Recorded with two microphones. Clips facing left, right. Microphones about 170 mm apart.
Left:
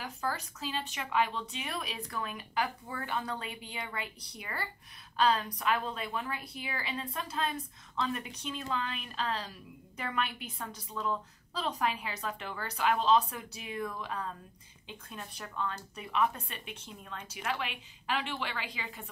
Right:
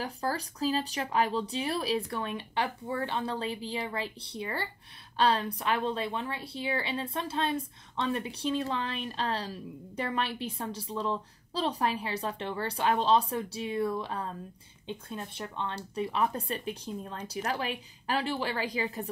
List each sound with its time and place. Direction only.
0.0 s speech: 35° right (ahead or behind)